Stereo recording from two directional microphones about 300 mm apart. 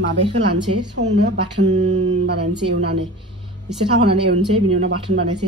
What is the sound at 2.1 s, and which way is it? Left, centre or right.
Speech, right.